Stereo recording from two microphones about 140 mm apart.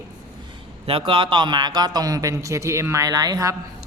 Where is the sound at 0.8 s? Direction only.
40° right (ahead or behind); by 3.5 s 25° right (ahead or behind).